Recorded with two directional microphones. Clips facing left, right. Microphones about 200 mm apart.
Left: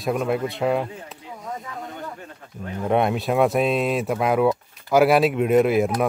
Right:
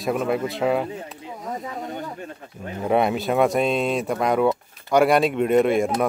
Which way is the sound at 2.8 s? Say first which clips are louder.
Even; centre (ahead or behind).